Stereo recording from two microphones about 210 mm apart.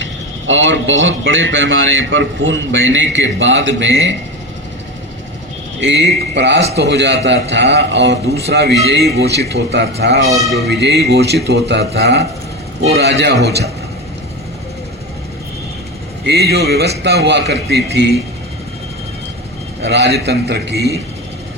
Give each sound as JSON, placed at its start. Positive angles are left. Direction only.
{"t": 0.0, "sound": "a man's voice", "side_deg": -60}
{"t": 5.8, "sound": "a man's voice", "side_deg": -60}
{"t": 16.2, "sound": "a man's voice", "side_deg": -50}
{"t": 19.8, "sound": "a man's voice", "side_deg": -50}